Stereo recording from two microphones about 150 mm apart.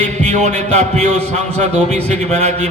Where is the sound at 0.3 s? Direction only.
55° right (ahead or behind).